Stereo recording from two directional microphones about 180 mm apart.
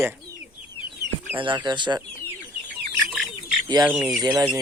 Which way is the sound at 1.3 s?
25° right (ahead or behind).